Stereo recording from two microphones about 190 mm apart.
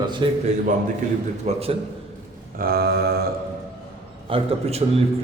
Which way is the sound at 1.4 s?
30° right (ahead or behind).